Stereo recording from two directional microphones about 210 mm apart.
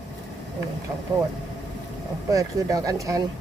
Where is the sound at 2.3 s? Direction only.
15° right (ahead or behind).